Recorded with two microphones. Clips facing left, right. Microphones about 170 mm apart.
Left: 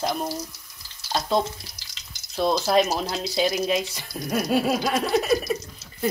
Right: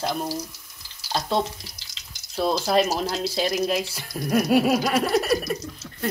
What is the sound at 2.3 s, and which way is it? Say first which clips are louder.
Speech: left 1 dB; 5° right (ahead or behind).